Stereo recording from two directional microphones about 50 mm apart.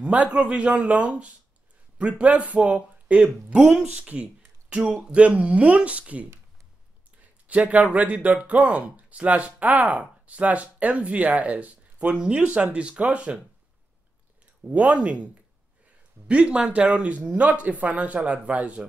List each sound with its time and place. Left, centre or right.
0.0 s a man's voice: right
3.6 s speech: centre
3.9 s speech: right
7.4 s speech: right
14.7 s speech: right